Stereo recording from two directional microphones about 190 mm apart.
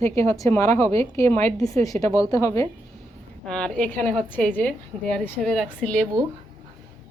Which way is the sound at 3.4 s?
5° left (ahead or behind).